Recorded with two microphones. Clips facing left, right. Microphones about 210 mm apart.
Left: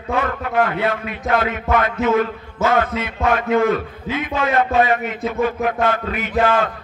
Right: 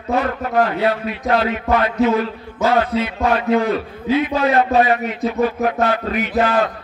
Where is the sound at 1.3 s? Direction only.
50° left (ahead or behind).